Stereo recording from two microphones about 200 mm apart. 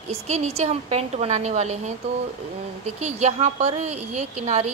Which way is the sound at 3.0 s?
35° right (ahead or behind).